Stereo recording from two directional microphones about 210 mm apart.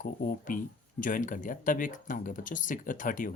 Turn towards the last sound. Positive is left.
turn(degrees=40)  # may be behind; listen again after turning